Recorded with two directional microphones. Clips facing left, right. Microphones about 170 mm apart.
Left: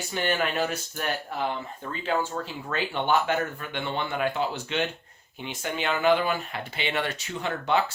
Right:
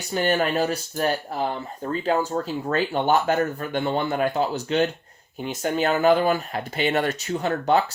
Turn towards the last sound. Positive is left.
turn(degrees=-40)  # may be behind; listen again after turning